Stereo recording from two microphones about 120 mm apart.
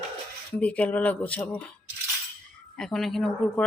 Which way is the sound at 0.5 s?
10° left (ahead or behind).